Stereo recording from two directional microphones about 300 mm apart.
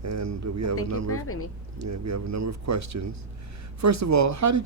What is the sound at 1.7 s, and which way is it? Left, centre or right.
Speech, right.